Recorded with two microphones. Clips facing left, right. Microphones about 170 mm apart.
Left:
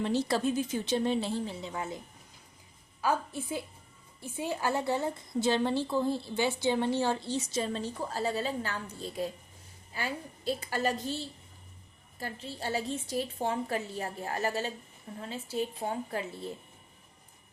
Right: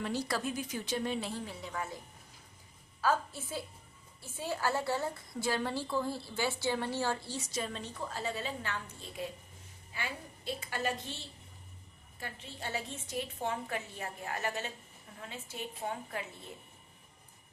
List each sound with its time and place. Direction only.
0.0 s a woman's voice: 25° left (ahead or behind)
3.0 s a woman's voice: 15° left (ahead or behind); by 16.5 s 35° left (ahead or behind)